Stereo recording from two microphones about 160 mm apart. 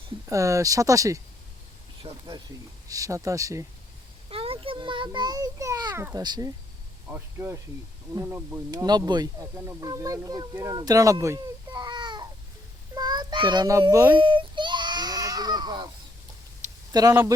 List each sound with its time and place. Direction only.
0.3 s speech: 20° right (ahead or behind)
2.0 s speech: 40° right (ahead or behind)
2.9 s speech: 20° right (ahead or behind)
4.3 s a child's voice: 35° right (ahead or behind); by 8.6 s 15° right (ahead or behind)
8.7 s speech: 25° right (ahead or behind)
10.8 s babbling: 20° right (ahead or behind)
12.9 s a sound: 25° right (ahead or behind)
14.2 s a sound: 30° right (ahead or behind)
16.9 s speech: 25° right (ahead or behind)